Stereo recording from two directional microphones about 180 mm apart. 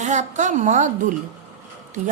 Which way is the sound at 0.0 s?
40° right (ahead or behind).